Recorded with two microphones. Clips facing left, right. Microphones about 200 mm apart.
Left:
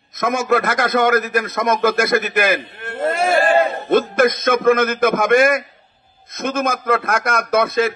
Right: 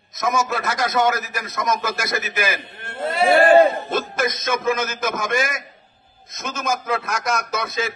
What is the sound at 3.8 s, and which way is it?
A man's voice, 55° left (ahead or behind).